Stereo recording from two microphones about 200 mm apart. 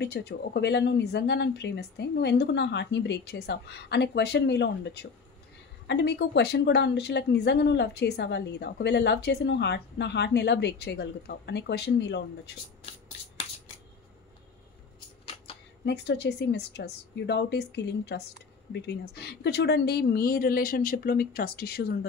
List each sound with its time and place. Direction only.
0.0 s speech: 55° left (ahead or behind)
15.8 s speech: 55° left (ahead or behind)